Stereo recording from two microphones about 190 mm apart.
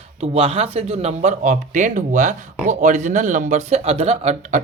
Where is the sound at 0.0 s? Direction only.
30° right (ahead or behind).